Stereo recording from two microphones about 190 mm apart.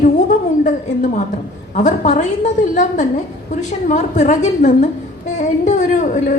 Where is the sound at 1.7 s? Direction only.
40° left (ahead or behind).